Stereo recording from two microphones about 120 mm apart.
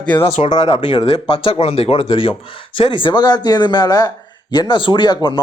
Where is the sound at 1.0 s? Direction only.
50° left (ahead or behind).